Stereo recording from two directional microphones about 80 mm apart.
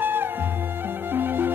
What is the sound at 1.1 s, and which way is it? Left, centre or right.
Music, right.